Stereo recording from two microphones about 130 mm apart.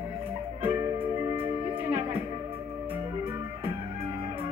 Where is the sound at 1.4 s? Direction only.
15° right (ahead or behind).